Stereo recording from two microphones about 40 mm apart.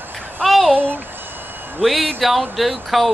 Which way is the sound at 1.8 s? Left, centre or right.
Centre.